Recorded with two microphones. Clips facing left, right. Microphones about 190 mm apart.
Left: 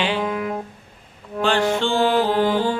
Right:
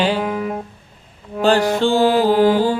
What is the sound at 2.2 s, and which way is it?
Music, 5° right (ahead or behind).